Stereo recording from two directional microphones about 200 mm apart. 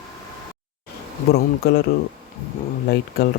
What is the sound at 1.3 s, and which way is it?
Speech, 55° left (ahead or behind).